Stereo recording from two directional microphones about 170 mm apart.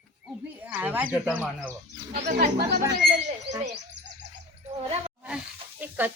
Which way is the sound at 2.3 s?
65° right (ahead or behind).